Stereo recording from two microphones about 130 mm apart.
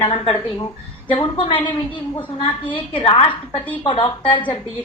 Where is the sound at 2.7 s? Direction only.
45° left (ahead or behind).